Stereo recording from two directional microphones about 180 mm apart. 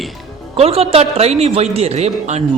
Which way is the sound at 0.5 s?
35° right (ahead or behind).